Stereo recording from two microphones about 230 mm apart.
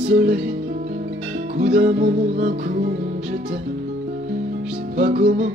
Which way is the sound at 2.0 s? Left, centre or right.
Right.